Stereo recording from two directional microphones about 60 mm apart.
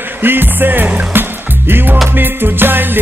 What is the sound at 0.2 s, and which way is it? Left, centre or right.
Music, right.